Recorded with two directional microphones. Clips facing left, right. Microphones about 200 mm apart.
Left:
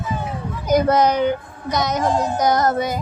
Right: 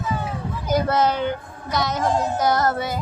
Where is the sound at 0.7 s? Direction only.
20° left (ahead or behind).